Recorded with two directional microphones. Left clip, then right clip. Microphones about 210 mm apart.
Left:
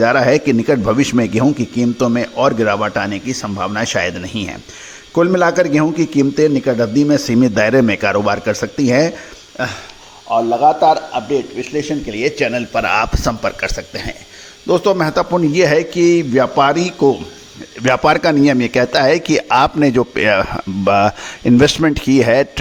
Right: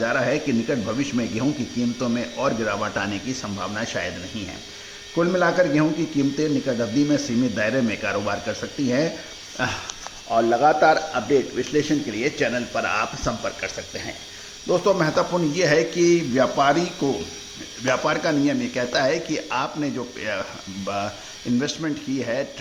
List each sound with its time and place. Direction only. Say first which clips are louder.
0.0 s speech: left 10 dB; 40° left (ahead or behind)
9.6 s speech: left 4 dB; 25° left (ahead or behind)
10.3 s speech: left 6 dB; 45° left (ahead or behind)
11.3 s speech: left 3 dB; 30° left (ahead or behind)
12.1 s speech: left 10 dB; 40° left (ahead or behind)